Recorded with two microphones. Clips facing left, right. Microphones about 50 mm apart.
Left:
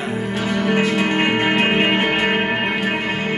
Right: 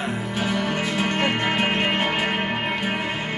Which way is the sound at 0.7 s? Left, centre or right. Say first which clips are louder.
Left 6 dB; left.